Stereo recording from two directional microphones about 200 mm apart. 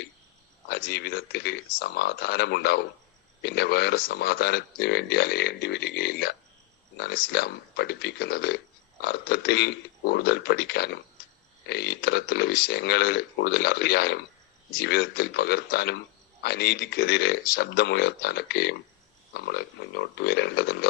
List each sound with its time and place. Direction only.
0.7 s speech: 55° left (ahead or behind)